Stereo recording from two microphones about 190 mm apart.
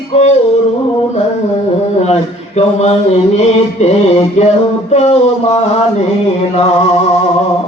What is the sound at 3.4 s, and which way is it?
Male singing, 35° left (ahead or behind).